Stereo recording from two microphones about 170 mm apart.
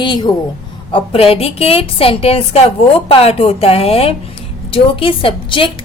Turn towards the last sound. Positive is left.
turn(degrees=30)  # may be behind; listen again after turning